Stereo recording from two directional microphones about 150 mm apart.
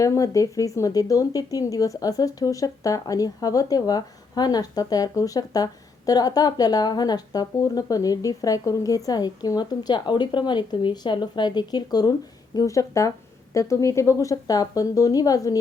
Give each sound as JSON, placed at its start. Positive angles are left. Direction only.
{"t": 0.0, "sound": "speech", "side_deg": 20}